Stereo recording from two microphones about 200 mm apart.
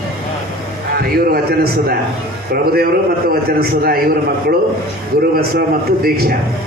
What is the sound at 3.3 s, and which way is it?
Speech, 50° right (ahead or behind).